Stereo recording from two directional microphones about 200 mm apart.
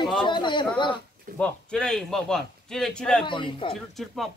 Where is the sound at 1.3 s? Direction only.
5° left (ahead or behind).